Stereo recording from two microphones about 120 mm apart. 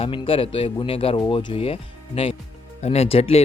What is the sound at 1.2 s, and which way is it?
Speech, 40° left (ahead or behind).